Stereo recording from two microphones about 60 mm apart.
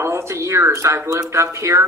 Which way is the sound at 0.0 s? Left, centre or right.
Right.